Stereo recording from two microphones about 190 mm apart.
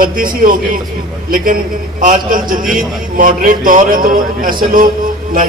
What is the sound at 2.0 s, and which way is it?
A man's voice, 45° right (ahead or behind).